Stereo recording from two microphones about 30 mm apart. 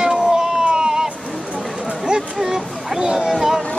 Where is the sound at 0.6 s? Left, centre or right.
Right.